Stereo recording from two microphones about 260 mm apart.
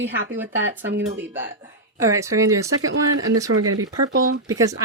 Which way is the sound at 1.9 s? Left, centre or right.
Centre.